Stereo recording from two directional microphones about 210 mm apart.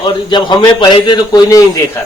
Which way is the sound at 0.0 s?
20° left (ahead or behind).